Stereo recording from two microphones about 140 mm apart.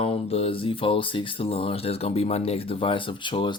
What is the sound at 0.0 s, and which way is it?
Speech, 45° left (ahead or behind).